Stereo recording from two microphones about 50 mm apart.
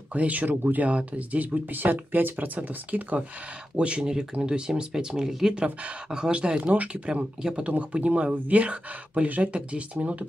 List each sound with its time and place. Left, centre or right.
0.1 s speech: right
3.7 s speech: right
5.6 s speech: right
6.0 s speech: centre
7.7 s speech: right